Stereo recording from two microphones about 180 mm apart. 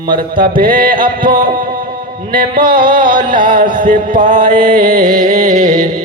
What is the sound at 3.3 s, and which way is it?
Music, 25° right (ahead or behind).